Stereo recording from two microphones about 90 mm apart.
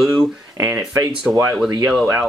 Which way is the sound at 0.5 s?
30° right (ahead or behind).